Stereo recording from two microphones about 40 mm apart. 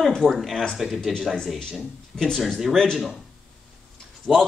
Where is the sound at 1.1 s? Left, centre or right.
Centre.